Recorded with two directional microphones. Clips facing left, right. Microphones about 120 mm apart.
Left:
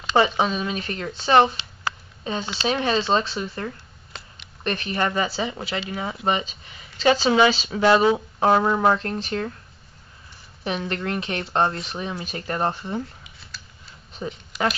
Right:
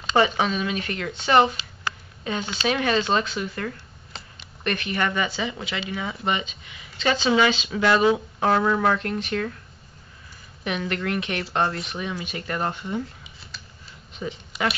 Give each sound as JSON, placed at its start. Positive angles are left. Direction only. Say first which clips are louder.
{"t": 0.4, "sound": "speech", "louder": "left 1 dB", "side_deg": 30}
{"t": 10.6, "sound": "speech", "louder": "even", "side_deg": 30}
{"t": 13.5, "sound": "a sound", "louder": "left 1 dB", "side_deg": 0}
{"t": 14.2, "sound": "speech", "louder": "even", "side_deg": 35}